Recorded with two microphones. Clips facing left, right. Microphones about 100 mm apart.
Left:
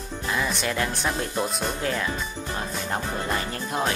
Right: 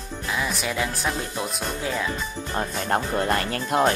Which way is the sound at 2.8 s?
60° right (ahead or behind).